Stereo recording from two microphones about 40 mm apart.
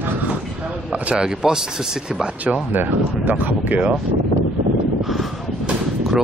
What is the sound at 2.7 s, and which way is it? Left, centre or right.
Speech, right.